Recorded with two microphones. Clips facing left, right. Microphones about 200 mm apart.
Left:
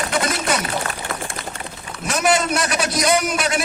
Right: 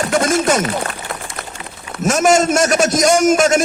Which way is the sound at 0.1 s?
45° right (ahead or behind).